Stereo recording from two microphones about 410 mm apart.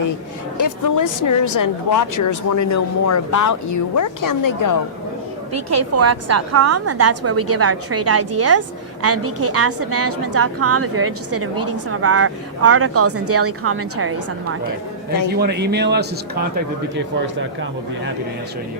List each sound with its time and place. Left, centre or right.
0.6 s a woman's voice: left
5.5 s a woman's voice: right
15.4 s speech: right